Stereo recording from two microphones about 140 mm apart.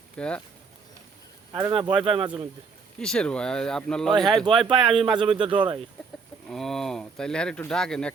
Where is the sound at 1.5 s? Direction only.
35° right (ahead or behind).